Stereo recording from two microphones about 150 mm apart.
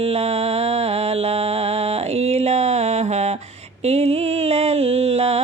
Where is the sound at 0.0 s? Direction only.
45° right (ahead or behind).